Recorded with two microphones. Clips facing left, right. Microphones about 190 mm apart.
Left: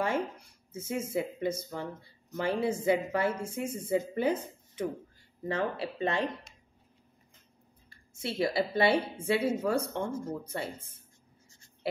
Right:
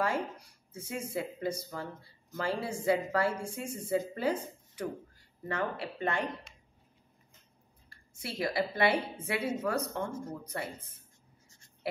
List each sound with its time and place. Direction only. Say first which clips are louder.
0.7 s speech: left 4 dB; 25° left (ahead or behind)
8.2 s speech: left 3 dB; 25° left (ahead or behind)